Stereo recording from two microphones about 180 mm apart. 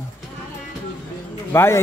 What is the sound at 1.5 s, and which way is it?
Speech, 15° left (ahead or behind).